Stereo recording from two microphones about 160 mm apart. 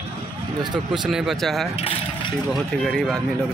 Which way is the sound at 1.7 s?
35° left (ahead or behind).